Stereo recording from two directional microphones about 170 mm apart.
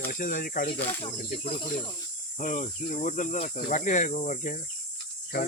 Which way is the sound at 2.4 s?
50° left (ahead or behind).